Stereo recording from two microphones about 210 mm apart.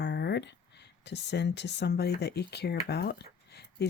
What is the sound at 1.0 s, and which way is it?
Speech, 55° left (ahead or behind).